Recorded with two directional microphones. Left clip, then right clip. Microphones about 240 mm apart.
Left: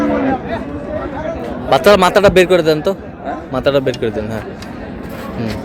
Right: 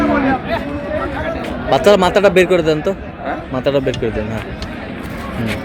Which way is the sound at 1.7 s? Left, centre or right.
Centre.